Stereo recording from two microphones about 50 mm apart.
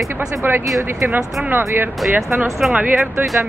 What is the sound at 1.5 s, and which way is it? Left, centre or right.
Speech, right.